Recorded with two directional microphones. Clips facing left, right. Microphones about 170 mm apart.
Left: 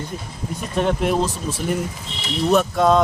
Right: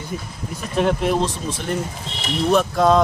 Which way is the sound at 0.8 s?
Centre (ahead or behind).